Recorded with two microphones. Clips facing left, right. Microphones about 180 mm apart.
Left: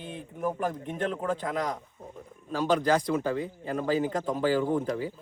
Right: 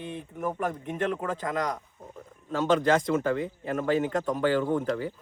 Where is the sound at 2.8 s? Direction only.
15° left (ahead or behind).